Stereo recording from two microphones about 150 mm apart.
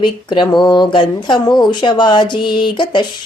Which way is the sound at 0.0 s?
30° left (ahead or behind).